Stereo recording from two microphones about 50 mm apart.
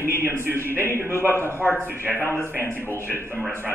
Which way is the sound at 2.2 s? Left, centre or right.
Left.